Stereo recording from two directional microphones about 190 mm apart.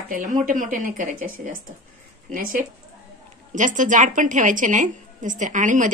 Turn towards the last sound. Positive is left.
turn(degrees=-40)  # may be behind; listen again after turning